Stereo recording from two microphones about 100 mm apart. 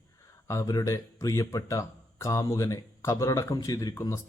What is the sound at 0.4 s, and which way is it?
Speech, 35° left (ahead or behind).